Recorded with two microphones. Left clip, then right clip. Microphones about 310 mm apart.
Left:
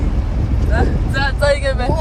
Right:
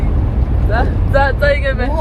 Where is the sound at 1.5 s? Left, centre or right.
Centre.